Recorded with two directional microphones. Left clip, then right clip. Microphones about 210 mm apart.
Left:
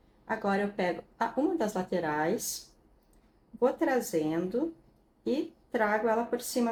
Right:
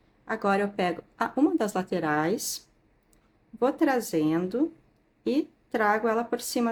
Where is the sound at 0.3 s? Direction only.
45° right (ahead or behind).